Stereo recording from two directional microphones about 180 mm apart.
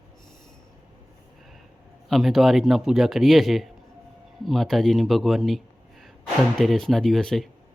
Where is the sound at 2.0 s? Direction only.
Centre (ahead or behind).